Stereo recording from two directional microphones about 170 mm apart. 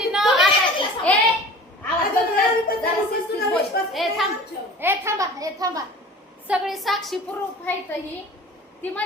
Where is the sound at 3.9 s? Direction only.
Centre (ahead or behind).